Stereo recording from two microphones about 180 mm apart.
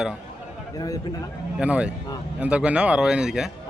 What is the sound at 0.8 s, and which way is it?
Speech, 20° left (ahead or behind).